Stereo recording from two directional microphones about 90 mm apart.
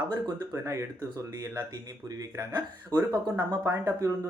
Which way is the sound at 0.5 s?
35° right (ahead or behind).